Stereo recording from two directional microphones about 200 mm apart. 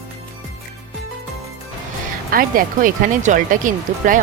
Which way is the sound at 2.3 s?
45° right (ahead or behind).